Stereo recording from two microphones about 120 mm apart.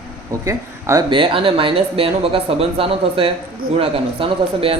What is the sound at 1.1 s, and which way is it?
A man's voice, 45° right (ahead or behind).